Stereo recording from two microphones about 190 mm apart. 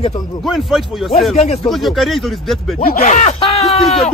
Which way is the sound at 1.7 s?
Centre (ahead or behind).